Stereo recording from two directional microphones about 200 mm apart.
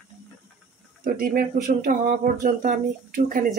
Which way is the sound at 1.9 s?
40° right (ahead or behind).